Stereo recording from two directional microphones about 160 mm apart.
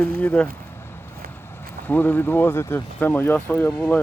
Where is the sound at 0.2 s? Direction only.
10° left (ahead or behind).